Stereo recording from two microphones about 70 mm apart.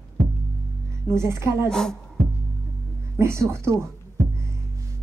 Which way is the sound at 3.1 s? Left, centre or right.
Right.